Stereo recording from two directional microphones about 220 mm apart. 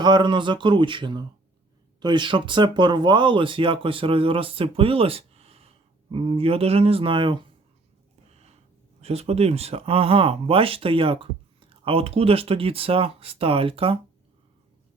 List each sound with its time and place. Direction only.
0.0 s speech: 20° right (ahead or behind)
9.0 s speech: 30° right (ahead or behind)